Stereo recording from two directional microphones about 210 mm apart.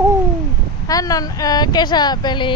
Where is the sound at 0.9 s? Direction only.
15° left (ahead or behind).